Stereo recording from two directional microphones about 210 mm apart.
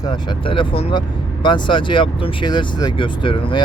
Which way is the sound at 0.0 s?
20° left (ahead or behind).